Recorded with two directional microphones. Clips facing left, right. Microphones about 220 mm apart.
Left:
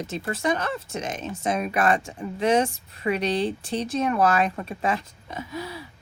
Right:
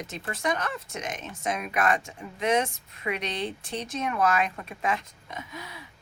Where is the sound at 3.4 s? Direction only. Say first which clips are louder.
Left 6 dB; centre (ahead or behind).